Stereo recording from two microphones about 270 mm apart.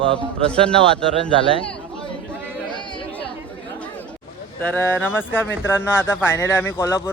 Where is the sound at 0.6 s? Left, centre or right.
Centre.